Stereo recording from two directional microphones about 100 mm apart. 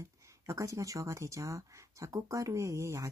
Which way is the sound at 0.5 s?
30° right (ahead or behind).